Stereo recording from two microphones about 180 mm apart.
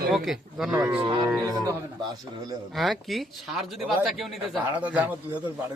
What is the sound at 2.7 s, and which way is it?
A man's voice, centre (ahead or behind).